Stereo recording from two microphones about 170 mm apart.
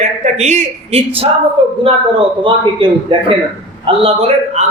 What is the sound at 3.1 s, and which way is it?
A man's voice, 30° right (ahead or behind).